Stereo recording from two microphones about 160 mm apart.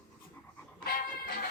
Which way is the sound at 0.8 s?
70° left (ahead or behind).